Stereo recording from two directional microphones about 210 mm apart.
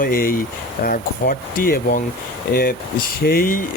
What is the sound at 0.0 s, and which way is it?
Speech, 40° left (ahead or behind).